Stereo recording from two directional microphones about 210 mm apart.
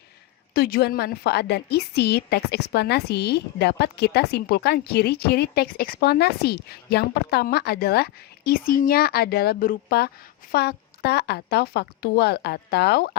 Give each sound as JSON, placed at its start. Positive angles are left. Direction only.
{"t": 0.5, "sound": "a woman's voice", "side_deg": 45}